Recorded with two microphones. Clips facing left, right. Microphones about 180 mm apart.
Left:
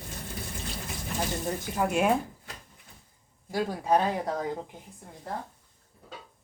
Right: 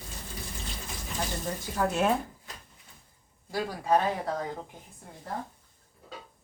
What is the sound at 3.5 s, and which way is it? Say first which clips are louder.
Speech: left 1 dB; 15° left (ahead or behind).